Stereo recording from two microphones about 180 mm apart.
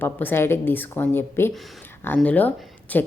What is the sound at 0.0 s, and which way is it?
Speech, 10° left (ahead or behind).